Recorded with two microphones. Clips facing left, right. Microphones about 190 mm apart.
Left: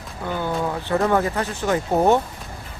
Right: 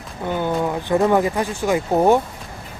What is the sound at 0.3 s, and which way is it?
Speech, 20° right (ahead or behind).